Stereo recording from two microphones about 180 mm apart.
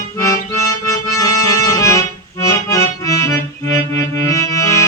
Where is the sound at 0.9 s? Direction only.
20° left (ahead or behind).